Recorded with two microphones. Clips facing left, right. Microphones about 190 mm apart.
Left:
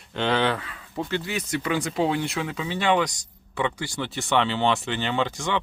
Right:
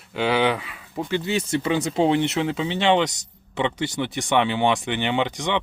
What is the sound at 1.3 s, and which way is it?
Speech, 25° right (ahead or behind).